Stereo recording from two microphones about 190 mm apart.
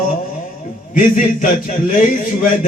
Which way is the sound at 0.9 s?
45° left (ahead or behind).